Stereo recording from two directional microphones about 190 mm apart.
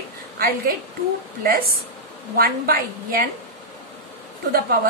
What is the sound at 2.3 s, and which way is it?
Speech, 50° right (ahead or behind).